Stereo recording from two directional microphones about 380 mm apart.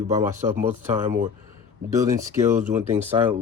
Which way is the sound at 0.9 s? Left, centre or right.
Centre.